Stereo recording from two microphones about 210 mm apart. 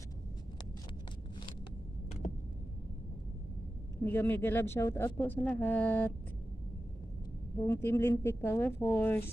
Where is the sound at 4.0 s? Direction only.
10° left (ahead or behind).